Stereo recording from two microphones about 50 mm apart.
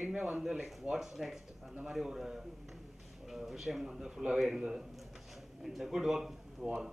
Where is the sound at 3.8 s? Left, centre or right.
Centre.